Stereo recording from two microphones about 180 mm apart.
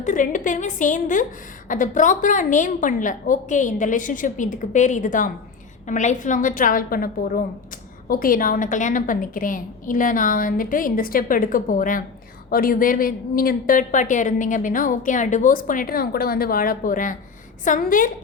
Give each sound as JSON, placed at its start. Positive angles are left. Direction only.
{"t": 0.0, "sound": "a woman's voice", "side_deg": 45}